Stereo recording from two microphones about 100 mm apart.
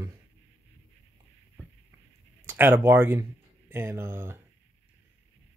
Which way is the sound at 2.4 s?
20° right (ahead or behind).